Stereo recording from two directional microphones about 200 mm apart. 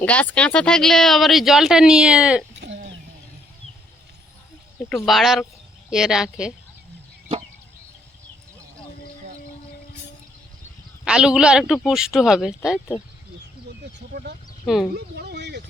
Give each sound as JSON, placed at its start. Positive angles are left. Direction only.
{"t": 0.0, "sound": "speech", "side_deg": 5}
{"t": 2.6, "sound": "a sound", "side_deg": -60}
{"t": 4.9, "sound": "speech", "side_deg": 0}
{"t": 11.0, "sound": "speech", "side_deg": -5}
{"t": 14.1, "sound": "speech", "side_deg": -50}